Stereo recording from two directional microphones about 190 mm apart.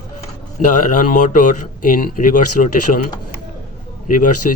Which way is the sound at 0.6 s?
40° left (ahead or behind).